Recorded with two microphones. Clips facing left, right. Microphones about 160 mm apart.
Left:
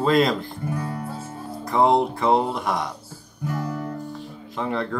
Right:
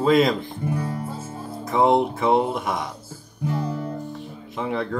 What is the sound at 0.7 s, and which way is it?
Music, 15° right (ahead or behind).